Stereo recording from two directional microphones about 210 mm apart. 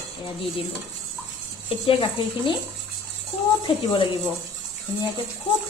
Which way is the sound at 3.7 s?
25° left (ahead or behind).